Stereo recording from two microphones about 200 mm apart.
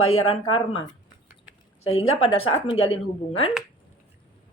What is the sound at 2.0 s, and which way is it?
Speech, 90° left.